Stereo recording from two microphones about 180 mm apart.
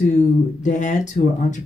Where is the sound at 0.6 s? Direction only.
40° left (ahead or behind).